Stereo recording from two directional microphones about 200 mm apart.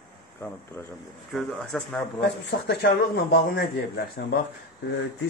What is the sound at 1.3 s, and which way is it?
Speech, centre (ahead or behind).